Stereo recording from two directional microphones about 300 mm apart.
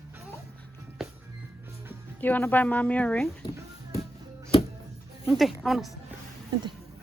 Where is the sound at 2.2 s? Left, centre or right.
Centre.